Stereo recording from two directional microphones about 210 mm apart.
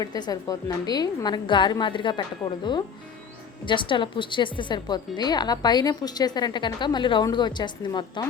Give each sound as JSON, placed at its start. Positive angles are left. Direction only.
{"t": 0.0, "sound": "a woman's voice", "side_deg": 20}